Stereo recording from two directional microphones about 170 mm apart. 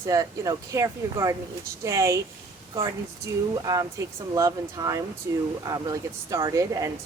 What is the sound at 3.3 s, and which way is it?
A woman's voice, 20° right (ahead or behind).